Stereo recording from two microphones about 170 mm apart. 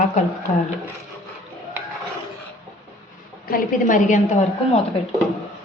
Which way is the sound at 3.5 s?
55° left (ahead or behind).